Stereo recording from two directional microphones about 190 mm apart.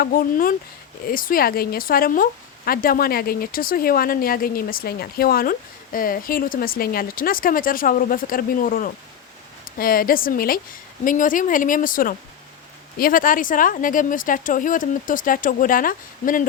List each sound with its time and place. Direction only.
0.0 s speech: 50° left (ahead or behind)